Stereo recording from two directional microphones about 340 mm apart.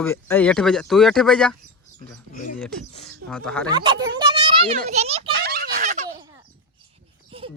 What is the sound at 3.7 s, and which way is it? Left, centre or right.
A child's voice, centre.